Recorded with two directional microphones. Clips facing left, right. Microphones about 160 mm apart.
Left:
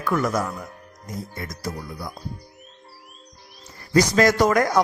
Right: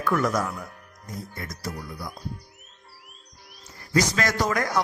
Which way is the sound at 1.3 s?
30° left (ahead or behind).